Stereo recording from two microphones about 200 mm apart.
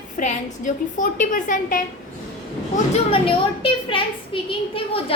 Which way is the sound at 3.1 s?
25° left (ahead or behind).